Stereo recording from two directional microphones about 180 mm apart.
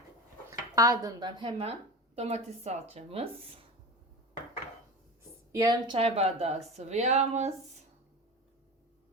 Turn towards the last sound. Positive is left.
turn(degrees=-40)  # may be behind; listen again after turning